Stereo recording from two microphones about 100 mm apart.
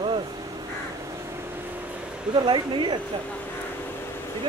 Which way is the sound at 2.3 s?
55° right (ahead or behind).